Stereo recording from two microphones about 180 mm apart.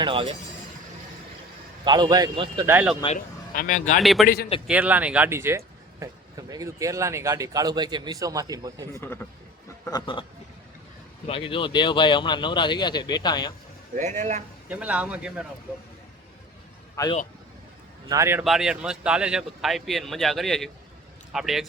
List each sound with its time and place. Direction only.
0.0 s a man's voice: 30° right (ahead or behind)
1.8 s a man's voice: 25° right (ahead or behind)
2.6 s speech: 10° right (ahead or behind)
3.2 s speech: 50° left (ahead or behind)
4.0 s speech: centre (ahead or behind); by 8.9 s 20° right (ahead or behind)
8.9 s speech: 15° left (ahead or behind)
9.8 s speech: 25° left (ahead or behind)
11.3 s speech: 30° left (ahead or behind)
13.9 s a man's voice: 40° right (ahead or behind)
14.7 s speech: 10° right (ahead or behind)
17.0 s speech: 15° left (ahead or behind)
18.1 s speech: 15° right (ahead or behind)
18.4 s speech: centre (ahead or behind)